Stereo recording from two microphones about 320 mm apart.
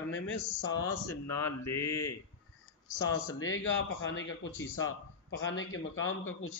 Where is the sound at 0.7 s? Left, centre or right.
Centre.